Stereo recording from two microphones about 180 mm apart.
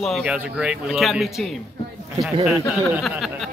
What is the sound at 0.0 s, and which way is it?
Speech, centre (ahead or behind).